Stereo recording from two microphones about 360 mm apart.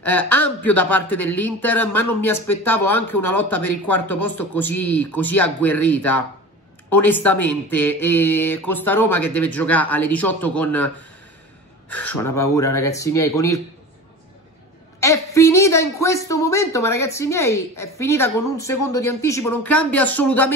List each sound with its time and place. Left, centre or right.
0.0 s speech: centre
11.9 s speech: centre
15.0 s speech: centre